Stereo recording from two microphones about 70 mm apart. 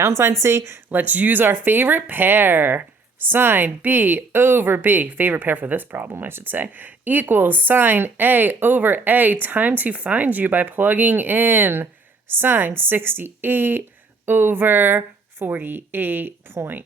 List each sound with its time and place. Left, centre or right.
0.4 s a woman's voice: right
0.9 s speech: right